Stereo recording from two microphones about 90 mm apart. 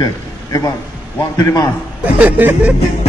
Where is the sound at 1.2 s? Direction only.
45° left (ahead or behind).